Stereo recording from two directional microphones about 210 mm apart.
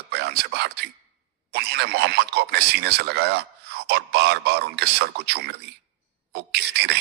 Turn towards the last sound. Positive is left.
turn(degrees=-50)  # may be behind; listen again after turning